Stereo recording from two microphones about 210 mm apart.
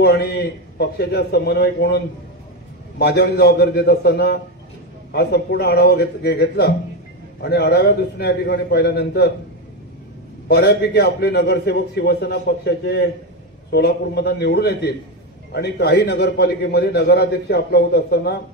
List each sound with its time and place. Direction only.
0.0 s a man's voice: 50° left (ahead or behind)
3.0 s a man's voice: 50° left (ahead or behind)
10.5 s a man's voice: 50° left (ahead or behind)